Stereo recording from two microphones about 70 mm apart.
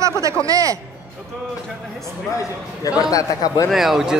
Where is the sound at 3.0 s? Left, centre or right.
Left.